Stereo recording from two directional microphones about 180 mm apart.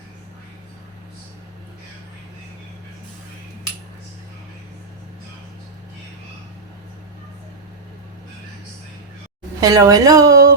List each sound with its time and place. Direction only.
9.6 s a woman's voice: 20° right (ahead or behind)